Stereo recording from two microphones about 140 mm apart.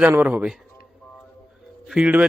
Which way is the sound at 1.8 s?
5° right (ahead or behind).